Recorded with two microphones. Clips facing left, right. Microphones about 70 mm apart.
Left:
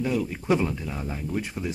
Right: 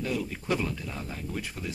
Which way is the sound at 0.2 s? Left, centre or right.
Centre.